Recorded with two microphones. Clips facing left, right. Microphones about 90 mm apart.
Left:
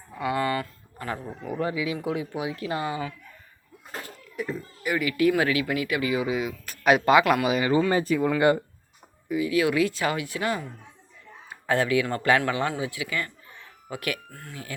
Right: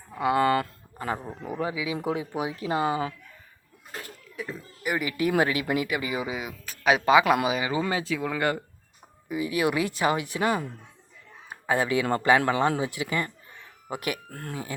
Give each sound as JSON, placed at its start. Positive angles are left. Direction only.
{"t": 0.3, "sound": "speech", "side_deg": -45}
{"t": 0.9, "sound": "speech", "side_deg": -20}
{"t": 2.0, "sound": "speech", "side_deg": -30}
{"t": 4.4, "sound": "children playing", "side_deg": 0}
{"t": 4.9, "sound": "speech", "side_deg": -20}
{"t": 5.9, "sound": "speech", "side_deg": -15}
{"t": 9.3, "sound": "speech", "side_deg": -20}
{"t": 11.6, "sound": "speech", "side_deg": -15}
{"t": 14.3, "sound": "speech", "side_deg": -50}